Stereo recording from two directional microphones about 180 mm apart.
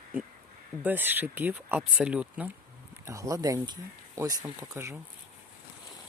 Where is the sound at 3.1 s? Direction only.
20° right (ahead or behind).